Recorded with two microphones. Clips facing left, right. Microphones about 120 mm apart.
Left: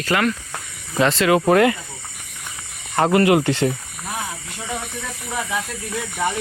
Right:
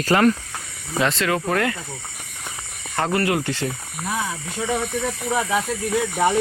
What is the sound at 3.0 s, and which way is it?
Speech, 20° left (ahead or behind).